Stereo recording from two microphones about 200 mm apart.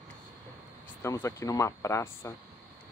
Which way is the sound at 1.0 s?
15° left (ahead or behind).